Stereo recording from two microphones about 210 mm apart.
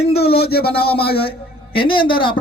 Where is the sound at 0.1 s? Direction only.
50° left (ahead or behind).